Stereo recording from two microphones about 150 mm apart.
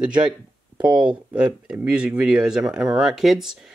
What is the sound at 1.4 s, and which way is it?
Speech, 5° right (ahead or behind).